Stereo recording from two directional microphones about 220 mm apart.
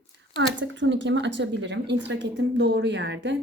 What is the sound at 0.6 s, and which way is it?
A woman's voice, 55° right (ahead or behind).